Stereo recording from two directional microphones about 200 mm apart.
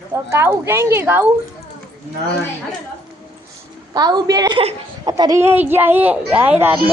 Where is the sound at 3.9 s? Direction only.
20° right (ahead or behind).